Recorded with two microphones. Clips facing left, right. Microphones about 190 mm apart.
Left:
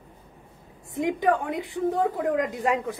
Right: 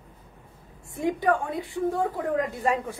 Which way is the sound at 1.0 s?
15° left (ahead or behind).